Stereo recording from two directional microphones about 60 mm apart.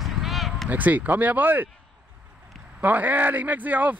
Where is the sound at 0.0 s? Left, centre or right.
Centre.